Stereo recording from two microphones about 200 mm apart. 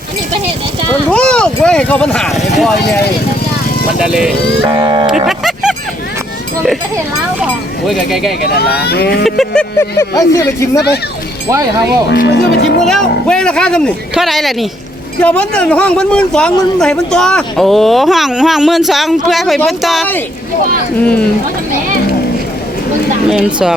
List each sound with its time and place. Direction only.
1.1 s a man's voice: 5° left (ahead or behind)
3.9 s a man's voice: 5° right (ahead or behind)
4.6 s speech: 20° right (ahead or behind)
5.2 s music: centre (ahead or behind)
7.9 s a man's voice: centre (ahead or behind)
8.8 s speech: 50° left (ahead or behind)
9.2 s a man's voice: centre (ahead or behind)
9.7 s speech: 15° left (ahead or behind)
12.0 s speech: 60° left (ahead or behind)
12.8 s a man's voice: 5° left (ahead or behind)
23.3 s a man's voice: 5° right (ahead or behind)